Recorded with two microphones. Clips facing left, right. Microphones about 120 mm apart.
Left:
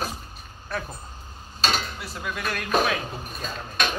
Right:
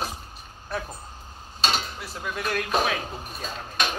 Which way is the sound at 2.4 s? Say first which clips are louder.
Left 1 dB; 20° right (ahead or behind).